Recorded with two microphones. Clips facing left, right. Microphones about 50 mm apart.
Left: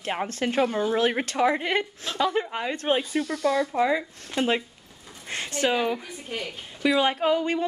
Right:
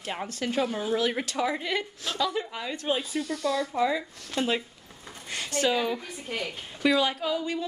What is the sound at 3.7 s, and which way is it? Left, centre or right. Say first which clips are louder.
A woman's voice: left 3 dB; left.